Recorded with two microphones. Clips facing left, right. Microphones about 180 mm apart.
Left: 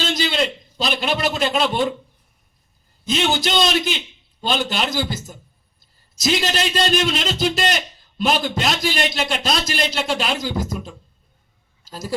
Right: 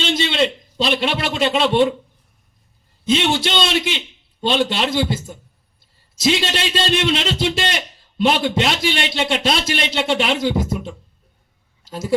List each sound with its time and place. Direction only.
0.0 s a sound: 25° right (ahead or behind)
1.5 s a man's voice: 25° right (ahead or behind)
3.1 s a man's voice: 25° right (ahead or behind)